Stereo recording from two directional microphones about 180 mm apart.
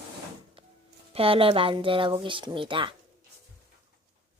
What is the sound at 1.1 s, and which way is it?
Speech, 30° right (ahead or behind).